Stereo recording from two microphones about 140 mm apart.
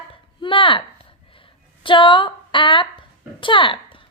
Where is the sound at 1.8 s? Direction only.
35° left (ahead or behind).